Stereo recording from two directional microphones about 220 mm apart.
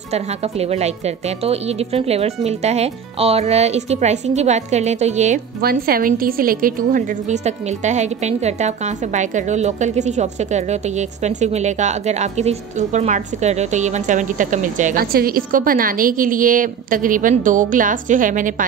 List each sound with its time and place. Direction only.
0.1 s a woman's voice: 30° right (ahead or behind)